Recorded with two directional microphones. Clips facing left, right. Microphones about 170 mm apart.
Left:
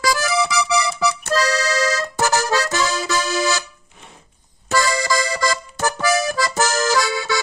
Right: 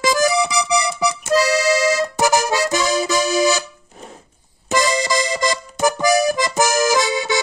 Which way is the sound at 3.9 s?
40° right (ahead or behind).